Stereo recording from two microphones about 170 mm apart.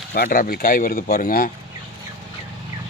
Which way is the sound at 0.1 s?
60° left (ahead or behind).